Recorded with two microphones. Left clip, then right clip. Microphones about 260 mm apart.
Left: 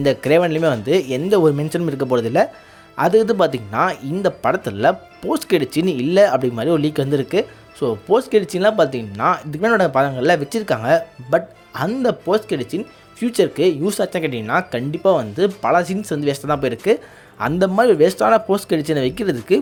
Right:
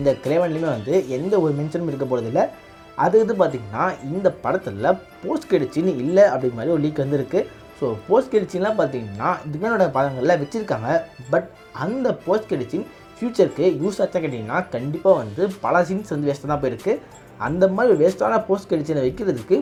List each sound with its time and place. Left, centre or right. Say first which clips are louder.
0.0 s speech: left 4 dB; left
15.0 s speech: left 1 dB; left
15.8 s speech: even; left
17.4 s speech: left 2 dB; left